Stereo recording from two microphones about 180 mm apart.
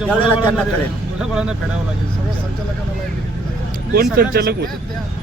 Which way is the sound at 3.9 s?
60° right (ahead or behind).